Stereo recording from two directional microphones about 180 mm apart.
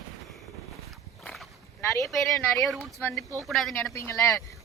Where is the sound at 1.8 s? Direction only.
15° left (ahead or behind).